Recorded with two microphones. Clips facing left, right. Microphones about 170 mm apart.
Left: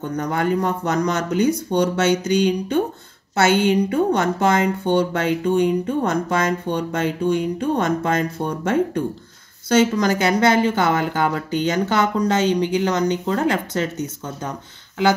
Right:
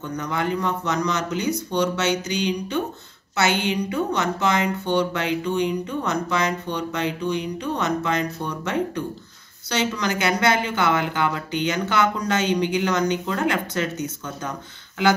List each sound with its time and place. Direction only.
0.1 s speech: 50° left (ahead or behind)